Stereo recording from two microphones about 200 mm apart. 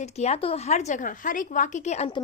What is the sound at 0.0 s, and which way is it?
A woman's voice, 35° left (ahead or behind).